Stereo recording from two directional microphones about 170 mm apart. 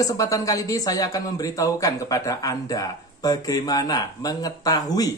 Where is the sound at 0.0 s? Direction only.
20° left (ahead or behind).